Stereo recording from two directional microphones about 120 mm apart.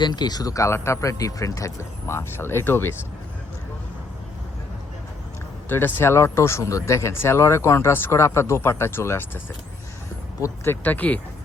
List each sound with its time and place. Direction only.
0.0 s speech: 35° left (ahead or behind); by 2.9 s 20° left (ahead or behind)
5.6 s speech: 20° left (ahead or behind)
10.4 s speech: 20° left (ahead or behind)